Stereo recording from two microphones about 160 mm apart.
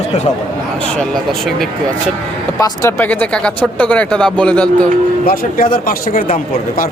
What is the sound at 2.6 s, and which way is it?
Speech, 20° left (ahead or behind).